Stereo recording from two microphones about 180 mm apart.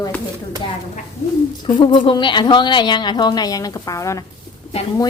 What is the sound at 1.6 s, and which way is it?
A woman's voice, 25° left (ahead or behind).